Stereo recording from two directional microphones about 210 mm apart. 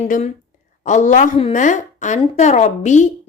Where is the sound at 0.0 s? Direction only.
30° left (ahead or behind).